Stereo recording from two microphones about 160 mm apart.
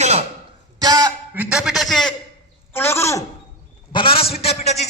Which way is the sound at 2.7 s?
15° left (ahead or behind).